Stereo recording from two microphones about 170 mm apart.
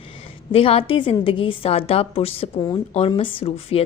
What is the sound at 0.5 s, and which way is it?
A woman's voice, 35° left (ahead or behind).